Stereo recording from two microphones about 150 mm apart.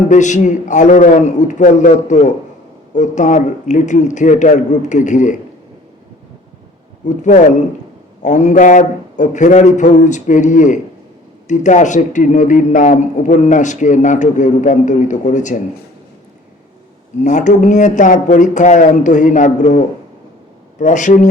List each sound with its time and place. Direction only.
0.1 s a man's voice: 55° left (ahead or behind)
7.2 s a man's voice: 55° left (ahead or behind)
17.2 s a man's voice: 55° left (ahead or behind)